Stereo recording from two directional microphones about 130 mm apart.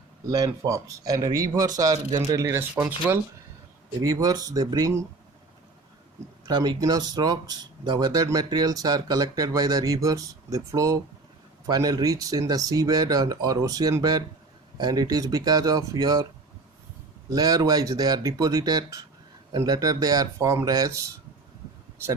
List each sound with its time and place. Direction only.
0.3 s speech: 30° right (ahead or behind); by 3.2 s 10° right (ahead or behind)
4.0 s speech: 30° right (ahead or behind)
6.4 s speech: 30° right (ahead or behind)
17.2 s speech: 30° right (ahead or behind)